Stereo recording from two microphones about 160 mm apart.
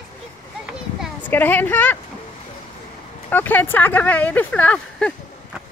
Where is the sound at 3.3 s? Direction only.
10° left (ahead or behind).